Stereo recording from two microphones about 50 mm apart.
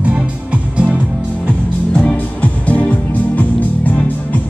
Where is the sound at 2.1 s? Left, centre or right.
Left.